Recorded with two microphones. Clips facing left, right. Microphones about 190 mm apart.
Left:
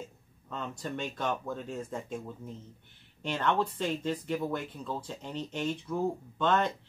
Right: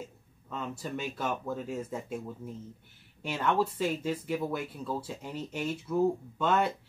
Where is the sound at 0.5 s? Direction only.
5° right (ahead or behind).